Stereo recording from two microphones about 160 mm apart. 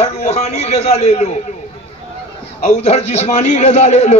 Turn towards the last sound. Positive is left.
turn(degrees=45)  # may be behind; listen again after turning